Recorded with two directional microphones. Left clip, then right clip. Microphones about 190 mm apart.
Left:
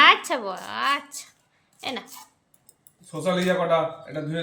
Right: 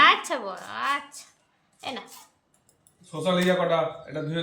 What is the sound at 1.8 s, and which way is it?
Speech, 35° left (ahead or behind).